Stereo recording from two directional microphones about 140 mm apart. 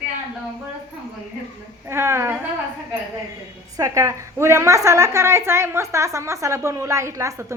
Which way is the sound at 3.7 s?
25° right (ahead or behind).